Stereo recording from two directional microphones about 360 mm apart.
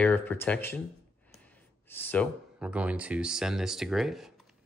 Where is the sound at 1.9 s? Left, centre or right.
Centre.